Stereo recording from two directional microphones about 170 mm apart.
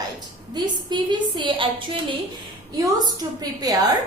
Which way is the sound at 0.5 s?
25° right (ahead or behind).